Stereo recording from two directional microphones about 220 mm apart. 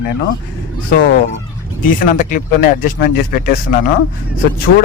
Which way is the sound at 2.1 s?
40° left (ahead or behind).